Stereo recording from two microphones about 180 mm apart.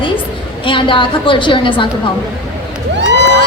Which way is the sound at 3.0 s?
80° right.